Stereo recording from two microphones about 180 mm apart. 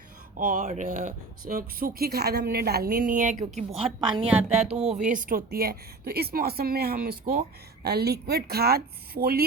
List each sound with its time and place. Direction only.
0.3 s speech: 50° right (ahead or behind); by 4.1 s 35° right (ahead or behind)
4.1 s a woman's voice: 5° right (ahead or behind)
5.0 s a woman's voice: 45° right (ahead or behind)